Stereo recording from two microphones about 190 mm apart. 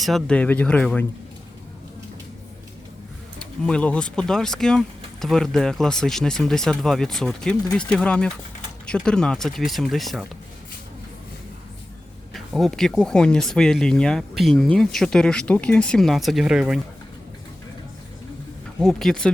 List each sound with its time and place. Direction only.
0.0 s speech: 5° left (ahead or behind)
3.3 s speech: 5° left (ahead or behind)
12.3 s speech: centre (ahead or behind)
18.8 s speech: centre (ahead or behind)